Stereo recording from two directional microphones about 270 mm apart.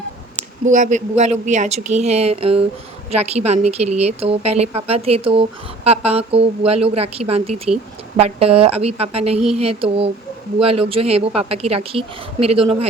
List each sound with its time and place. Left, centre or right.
0.6 s a woman's voice: right